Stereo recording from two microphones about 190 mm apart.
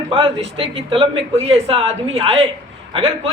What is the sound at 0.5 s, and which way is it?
A woman's voice, 30° right (ahead or behind).